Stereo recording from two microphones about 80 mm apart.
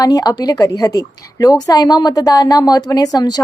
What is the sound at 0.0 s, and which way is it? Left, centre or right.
A woman's voice, left.